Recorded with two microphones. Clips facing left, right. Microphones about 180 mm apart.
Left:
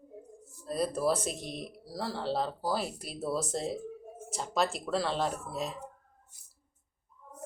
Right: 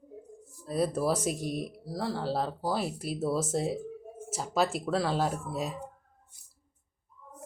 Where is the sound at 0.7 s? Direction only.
5° right (ahead or behind).